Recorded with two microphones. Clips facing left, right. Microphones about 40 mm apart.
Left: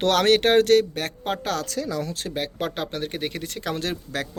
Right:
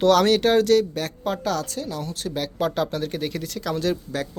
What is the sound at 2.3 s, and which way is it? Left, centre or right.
Speech, left.